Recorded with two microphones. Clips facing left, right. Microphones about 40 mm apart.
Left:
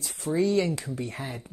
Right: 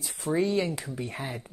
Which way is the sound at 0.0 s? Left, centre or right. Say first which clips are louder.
Left 1 dB; right.